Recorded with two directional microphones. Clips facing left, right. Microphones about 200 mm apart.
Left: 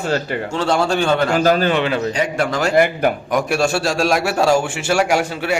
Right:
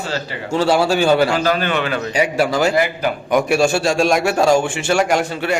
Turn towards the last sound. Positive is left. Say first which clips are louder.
# even
turn(degrees=10)  # may be behind; listen again after turning